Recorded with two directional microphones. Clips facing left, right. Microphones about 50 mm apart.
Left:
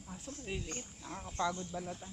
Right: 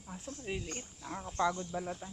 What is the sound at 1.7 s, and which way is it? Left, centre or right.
Speech, right.